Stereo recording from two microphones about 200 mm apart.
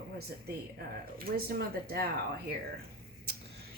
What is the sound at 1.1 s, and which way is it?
Speech, 50° right (ahead or behind).